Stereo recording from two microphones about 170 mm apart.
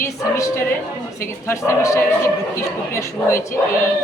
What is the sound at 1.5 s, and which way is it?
Speech, 15° left (ahead or behind).